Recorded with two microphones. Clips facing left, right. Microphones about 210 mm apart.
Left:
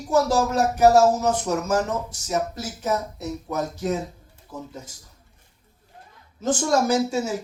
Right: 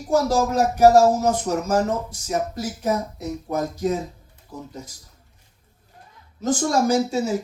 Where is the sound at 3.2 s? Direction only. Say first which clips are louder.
Right 2 dB; 35° right (ahead or behind).